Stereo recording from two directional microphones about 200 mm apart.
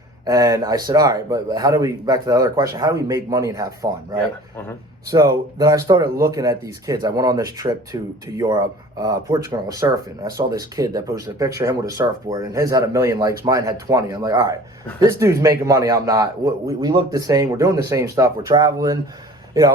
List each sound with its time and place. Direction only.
0.3 s speech: 20° right (ahead or behind)
5.1 s speech: 15° right (ahead or behind)